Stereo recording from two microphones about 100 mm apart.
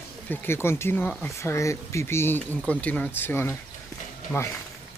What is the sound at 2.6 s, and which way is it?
Speech, 15° left (ahead or behind).